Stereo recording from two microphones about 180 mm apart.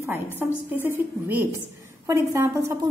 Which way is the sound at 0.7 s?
10° right (ahead or behind).